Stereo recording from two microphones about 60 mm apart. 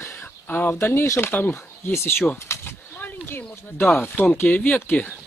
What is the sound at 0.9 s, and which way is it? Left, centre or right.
Speech, left.